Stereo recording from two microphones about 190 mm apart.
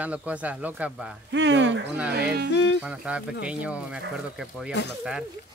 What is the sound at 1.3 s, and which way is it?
Speech, 70° right (ahead or behind).